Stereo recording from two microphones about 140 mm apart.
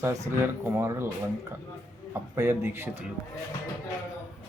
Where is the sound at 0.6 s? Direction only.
20° right (ahead or behind).